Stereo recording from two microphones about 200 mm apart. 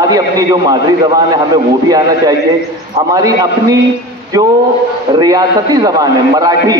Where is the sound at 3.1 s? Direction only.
20° right (ahead or behind).